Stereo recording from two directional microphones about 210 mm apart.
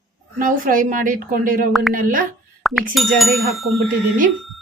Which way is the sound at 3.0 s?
Centre (ahead or behind).